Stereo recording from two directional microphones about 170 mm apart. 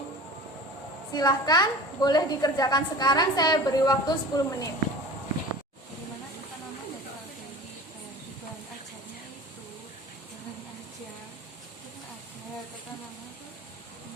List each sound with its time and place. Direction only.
1.1 s a woman's voice: 25° left (ahead or behind)